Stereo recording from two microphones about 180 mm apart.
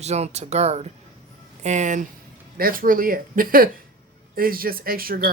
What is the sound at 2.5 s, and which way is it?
Speech, 55° right (ahead or behind).